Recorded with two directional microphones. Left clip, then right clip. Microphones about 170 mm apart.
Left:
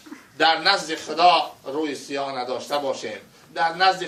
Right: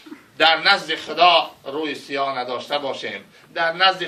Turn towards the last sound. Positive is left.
turn(degrees=30)  # may be behind; listen again after turning